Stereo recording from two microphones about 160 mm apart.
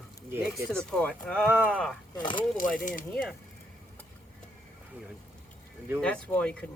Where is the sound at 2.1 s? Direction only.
30° left (ahead or behind).